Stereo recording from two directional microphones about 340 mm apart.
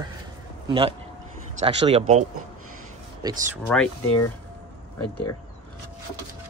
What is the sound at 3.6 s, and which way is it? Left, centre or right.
Speech, centre.